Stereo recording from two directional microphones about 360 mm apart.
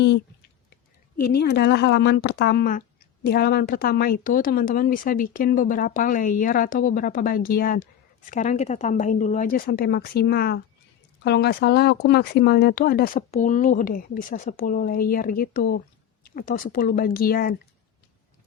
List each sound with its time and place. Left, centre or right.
1.3 s speech: left